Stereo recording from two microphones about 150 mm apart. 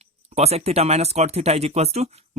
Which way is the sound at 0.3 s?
45° right (ahead or behind).